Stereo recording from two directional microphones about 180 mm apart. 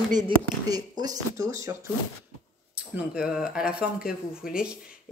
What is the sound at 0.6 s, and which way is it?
Speech, 20° right (ahead or behind).